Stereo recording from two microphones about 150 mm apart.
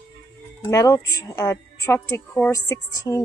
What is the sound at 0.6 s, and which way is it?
A woman's voice, 20° left (ahead or behind).